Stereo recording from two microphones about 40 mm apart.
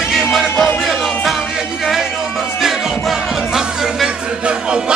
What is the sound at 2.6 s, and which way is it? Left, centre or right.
Music, centre.